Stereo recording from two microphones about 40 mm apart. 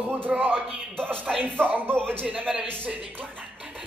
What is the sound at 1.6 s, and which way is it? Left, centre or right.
Speech, right.